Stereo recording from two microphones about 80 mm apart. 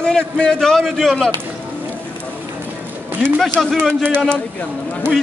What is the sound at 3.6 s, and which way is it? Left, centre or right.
Speech, centre.